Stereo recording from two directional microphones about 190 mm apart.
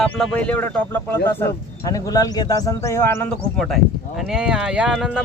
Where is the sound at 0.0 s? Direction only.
5° left (ahead or behind).